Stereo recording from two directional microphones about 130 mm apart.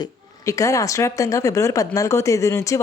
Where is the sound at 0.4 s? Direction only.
25° left (ahead or behind).